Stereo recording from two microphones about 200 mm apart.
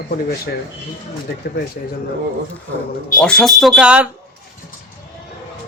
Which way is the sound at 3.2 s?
5° left (ahead or behind).